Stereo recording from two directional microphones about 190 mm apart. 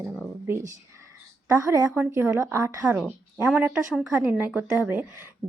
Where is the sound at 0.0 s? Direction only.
Centre (ahead or behind).